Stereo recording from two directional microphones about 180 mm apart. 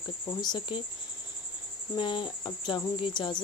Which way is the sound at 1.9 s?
25° left (ahead or behind).